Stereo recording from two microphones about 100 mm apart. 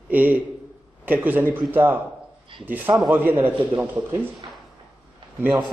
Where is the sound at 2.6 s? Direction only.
20° right (ahead or behind).